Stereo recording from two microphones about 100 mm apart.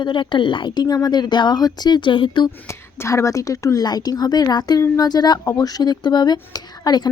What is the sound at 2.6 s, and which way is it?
A woman's voice, 30° left (ahead or behind).